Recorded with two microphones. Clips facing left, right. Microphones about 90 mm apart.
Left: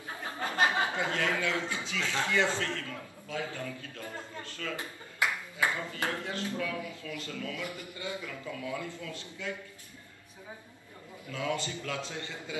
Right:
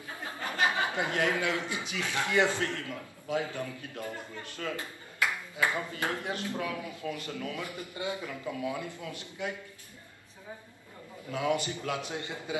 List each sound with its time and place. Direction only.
0.4 s a sound: 20° left (ahead or behind)
0.9 s a man's voice: 20° right (ahead or behind)
4.7 s clapping: 20° left (ahead or behind)
5.7 s a man's voice: 20° right (ahead or behind)
11.3 s a man's voice: 20° right (ahead or behind)